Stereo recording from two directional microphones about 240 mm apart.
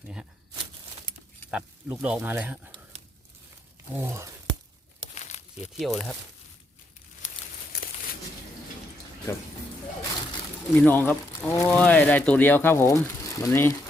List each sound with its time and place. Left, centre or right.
1.5 s speech: centre
3.9 s speech: centre
5.1 s a sound: left
5.7 s speech: centre
9.3 s speech: centre
10.8 s speech: centre